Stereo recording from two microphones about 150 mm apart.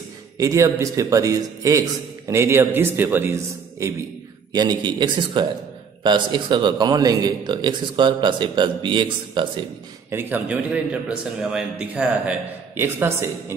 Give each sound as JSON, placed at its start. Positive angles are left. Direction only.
{"t": 0.4, "sound": "a man's voice", "side_deg": -20}
{"t": 10.1, "sound": "a man's voice", "side_deg": -10}